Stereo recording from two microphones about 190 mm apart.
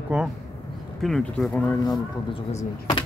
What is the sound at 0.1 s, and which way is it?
Speech, 5° right (ahead or behind).